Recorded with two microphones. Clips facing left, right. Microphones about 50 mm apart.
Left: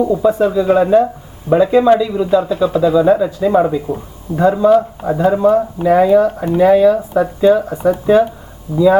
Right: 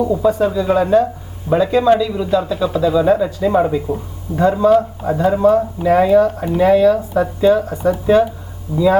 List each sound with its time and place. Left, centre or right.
0.0 s speech: centre
6.1 s speech: centre